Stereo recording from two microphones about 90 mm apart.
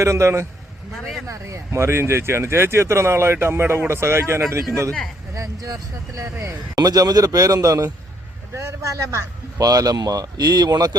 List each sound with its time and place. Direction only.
0.0 s a man's voice: 35° right (ahead or behind); by 10.9 s 50° right (ahead or behind)